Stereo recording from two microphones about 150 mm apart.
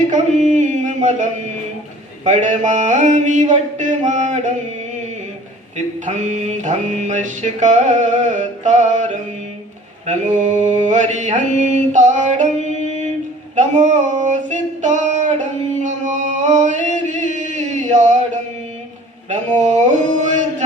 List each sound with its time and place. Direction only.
0.1 s mantra: 55° right (ahead or behind)
5.7 s mantra: 50° right (ahead or behind)
13.6 s a sound: 55° right (ahead or behind)
19.3 s mantra: 55° right (ahead or behind)